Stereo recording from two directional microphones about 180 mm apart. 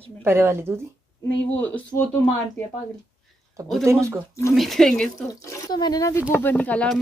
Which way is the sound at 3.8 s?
15° right (ahead or behind).